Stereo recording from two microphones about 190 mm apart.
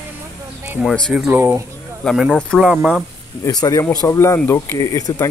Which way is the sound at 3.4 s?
20° left (ahead or behind).